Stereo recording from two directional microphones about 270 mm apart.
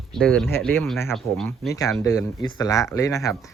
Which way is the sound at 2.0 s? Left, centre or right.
Centre.